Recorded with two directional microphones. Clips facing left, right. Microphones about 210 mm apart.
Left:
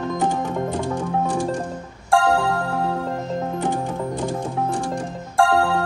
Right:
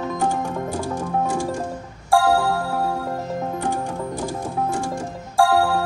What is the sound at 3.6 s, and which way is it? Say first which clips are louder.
Music: left 1 dB; 15° left (ahead or behind).